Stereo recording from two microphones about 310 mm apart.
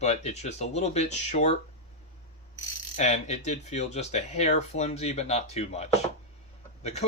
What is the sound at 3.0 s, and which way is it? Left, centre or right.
Speech, left.